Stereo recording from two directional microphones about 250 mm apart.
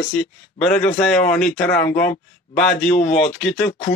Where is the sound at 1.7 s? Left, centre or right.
Left.